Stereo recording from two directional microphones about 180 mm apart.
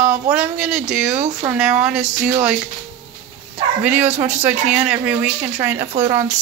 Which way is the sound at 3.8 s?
10° right (ahead or behind).